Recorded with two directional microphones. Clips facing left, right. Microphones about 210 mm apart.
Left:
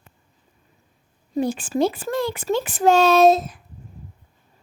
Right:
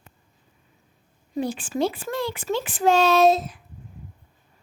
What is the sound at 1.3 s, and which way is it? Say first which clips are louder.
Speech: left 4 dB; 45° left (ahead or behind).